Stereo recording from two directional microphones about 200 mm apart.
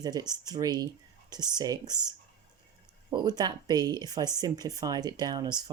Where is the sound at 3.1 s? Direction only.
20° right (ahead or behind).